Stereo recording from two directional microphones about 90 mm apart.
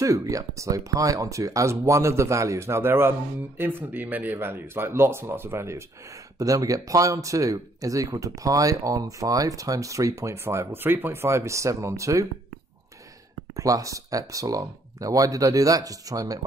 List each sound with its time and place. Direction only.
0.0 s speech: 35° right (ahead or behind)
13.6 s speech: 40° right (ahead or behind)